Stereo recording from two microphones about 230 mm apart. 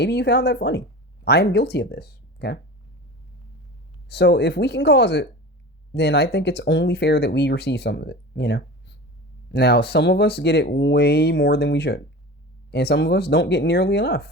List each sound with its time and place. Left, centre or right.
0.0 s speech: left
4.1 s speech: left